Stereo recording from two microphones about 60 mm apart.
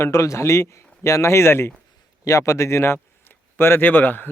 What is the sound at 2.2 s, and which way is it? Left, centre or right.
Speech, left.